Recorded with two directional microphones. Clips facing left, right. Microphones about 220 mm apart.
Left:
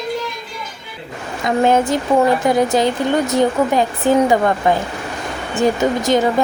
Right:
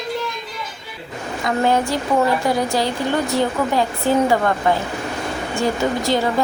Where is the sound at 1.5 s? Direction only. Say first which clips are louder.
Left 4 dB; 20° left (ahead or behind).